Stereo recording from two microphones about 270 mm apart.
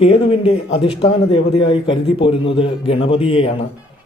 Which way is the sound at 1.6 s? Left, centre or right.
Centre.